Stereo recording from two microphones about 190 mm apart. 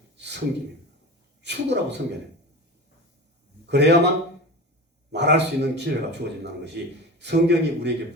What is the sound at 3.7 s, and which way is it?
Speech, 65° right (ahead or behind).